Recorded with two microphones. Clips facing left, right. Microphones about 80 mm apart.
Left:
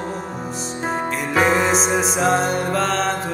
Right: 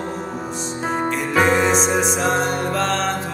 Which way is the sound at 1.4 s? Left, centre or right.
Centre.